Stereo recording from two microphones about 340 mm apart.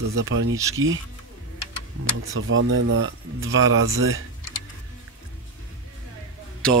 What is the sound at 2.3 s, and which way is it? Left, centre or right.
Speech, right.